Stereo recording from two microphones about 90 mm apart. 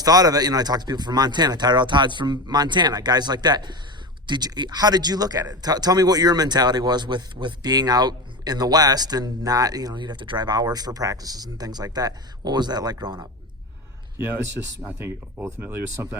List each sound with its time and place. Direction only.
0.0 s speech: 45° right (ahead or behind)
15.6 s speech: 30° right (ahead or behind)